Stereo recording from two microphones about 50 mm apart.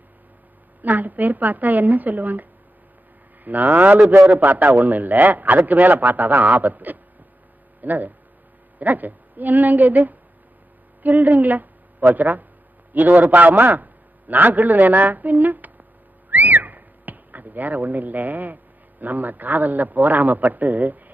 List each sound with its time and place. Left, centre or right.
0.8 s a man's voice: right